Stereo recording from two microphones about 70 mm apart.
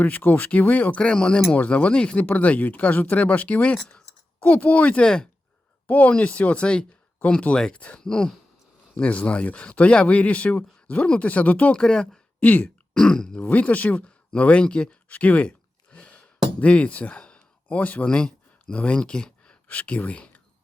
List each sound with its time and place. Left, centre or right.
0.0 s speech: left
12.4 s speech: left
12.9 s a sound: centre
13.5 s speech: left